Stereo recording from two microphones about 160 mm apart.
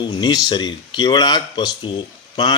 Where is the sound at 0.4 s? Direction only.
25° left (ahead or behind).